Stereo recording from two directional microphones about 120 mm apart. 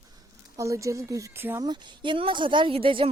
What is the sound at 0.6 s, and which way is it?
Speech, 25° right (ahead or behind).